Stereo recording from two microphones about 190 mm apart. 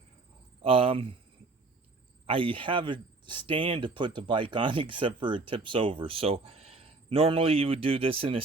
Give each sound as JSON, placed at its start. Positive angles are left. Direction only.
{"t": 0.6, "sound": "speech", "side_deg": -30}
{"t": 2.2, "sound": "speech", "side_deg": -30}